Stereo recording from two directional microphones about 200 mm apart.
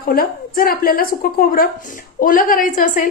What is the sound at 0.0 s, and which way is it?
A woman's voice, 45° left (ahead or behind).